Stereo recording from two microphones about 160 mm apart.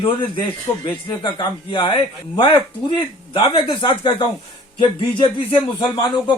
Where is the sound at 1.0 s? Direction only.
25° left (ahead or behind).